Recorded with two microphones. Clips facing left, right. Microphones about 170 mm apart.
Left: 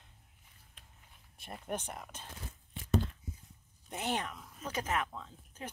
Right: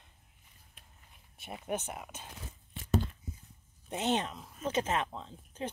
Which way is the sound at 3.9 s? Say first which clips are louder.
Right 5 dB; 25° right (ahead or behind).